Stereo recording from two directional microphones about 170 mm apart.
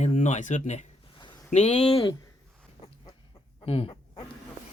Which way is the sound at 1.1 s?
25° left (ahead or behind).